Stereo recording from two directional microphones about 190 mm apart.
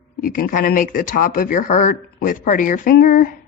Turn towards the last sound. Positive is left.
turn(degrees=45)  # may be behind; listen again after turning